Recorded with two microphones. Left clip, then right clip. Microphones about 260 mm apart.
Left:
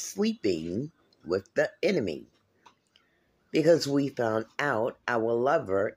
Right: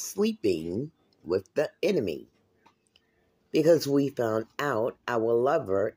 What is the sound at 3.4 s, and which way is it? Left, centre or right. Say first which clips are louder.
Speech: right 1 dB; centre.